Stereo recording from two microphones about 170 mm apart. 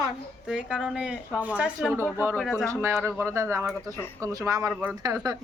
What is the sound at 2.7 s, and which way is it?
Speech, 15° right (ahead or behind).